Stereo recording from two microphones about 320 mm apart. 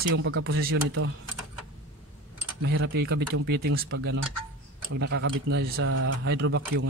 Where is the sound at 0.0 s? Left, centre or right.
Right.